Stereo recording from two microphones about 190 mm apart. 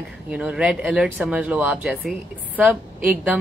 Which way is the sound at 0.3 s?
5° right (ahead or behind).